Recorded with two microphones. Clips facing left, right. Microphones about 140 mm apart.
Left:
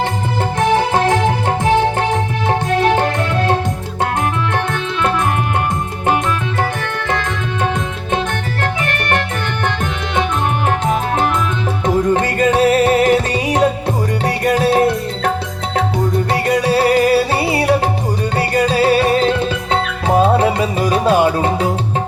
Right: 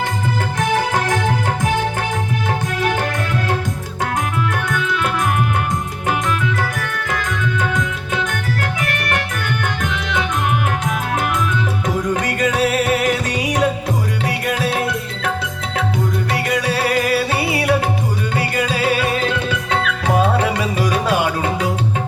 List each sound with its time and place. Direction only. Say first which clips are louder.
0.6 s music: left 5 dB; 30° left (ahead or behind)
7.1 s music: left 1 dB; 30° left (ahead or behind)
10.7 s music: left 5 dB; 30° left (ahead or behind)
16.3 s music: left 6 dB; 30° left (ahead or behind)